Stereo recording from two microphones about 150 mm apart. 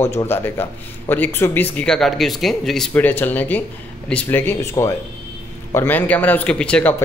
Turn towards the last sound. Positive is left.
turn(degrees=5)  # may be behind; listen again after turning